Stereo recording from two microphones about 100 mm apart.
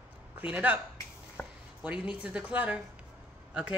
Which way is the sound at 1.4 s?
25° left (ahead or behind).